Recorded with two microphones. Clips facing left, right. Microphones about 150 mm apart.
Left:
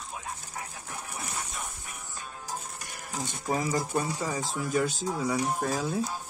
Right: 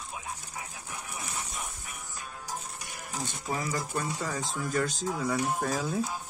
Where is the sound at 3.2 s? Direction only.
25° left (ahead or behind).